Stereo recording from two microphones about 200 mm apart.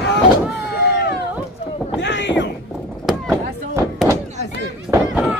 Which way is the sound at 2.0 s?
60° left (ahead or behind).